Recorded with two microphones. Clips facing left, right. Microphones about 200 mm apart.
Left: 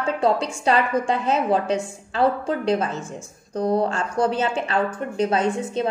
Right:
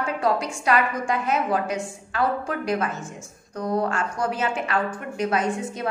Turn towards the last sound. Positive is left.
turn(degrees=30)  # may be behind; listen again after turning